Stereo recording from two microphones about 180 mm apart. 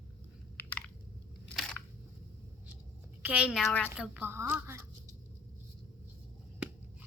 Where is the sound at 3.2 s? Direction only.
10° right (ahead or behind).